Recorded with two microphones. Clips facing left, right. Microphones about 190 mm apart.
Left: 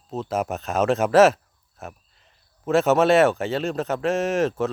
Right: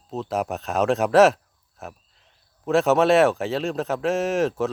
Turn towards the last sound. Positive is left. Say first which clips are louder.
# even
turn(degrees=0)  # may be behind; listen again after turning